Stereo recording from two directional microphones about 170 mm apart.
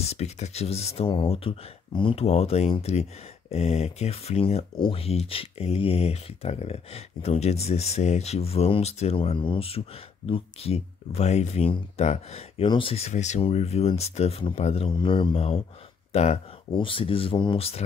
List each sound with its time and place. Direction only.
0.0 s speech: 40° left (ahead or behind)
16.7 s speech: 30° left (ahead or behind)